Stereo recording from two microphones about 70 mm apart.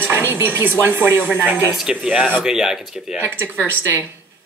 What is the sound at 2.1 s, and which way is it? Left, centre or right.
Speech, centre.